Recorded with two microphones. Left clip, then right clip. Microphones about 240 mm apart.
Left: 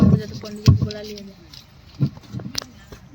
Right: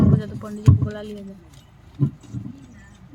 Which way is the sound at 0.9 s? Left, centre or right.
Right.